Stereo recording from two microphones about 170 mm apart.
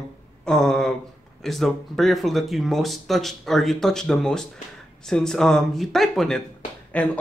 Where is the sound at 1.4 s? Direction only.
Centre (ahead or behind).